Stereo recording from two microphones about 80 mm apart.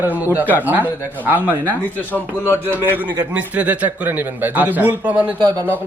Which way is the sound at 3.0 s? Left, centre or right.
Centre.